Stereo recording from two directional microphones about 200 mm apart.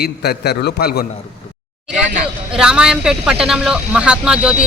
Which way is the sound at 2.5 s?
5° right (ahead or behind).